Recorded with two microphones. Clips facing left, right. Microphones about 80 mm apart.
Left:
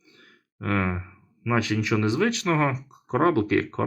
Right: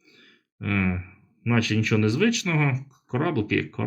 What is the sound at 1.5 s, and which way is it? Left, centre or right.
Speech, left.